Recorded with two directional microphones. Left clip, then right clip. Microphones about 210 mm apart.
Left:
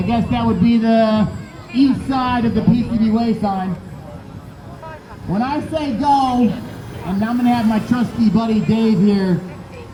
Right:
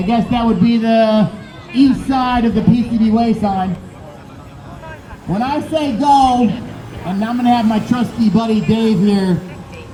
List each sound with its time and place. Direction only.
0.0 s a man's voice: 50° right (ahead or behind)
5.3 s a man's voice: 50° right (ahead or behind)